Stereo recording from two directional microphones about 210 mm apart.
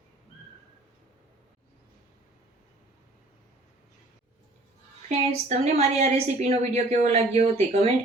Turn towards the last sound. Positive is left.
turn(degrees=-30)  # may be behind; listen again after turning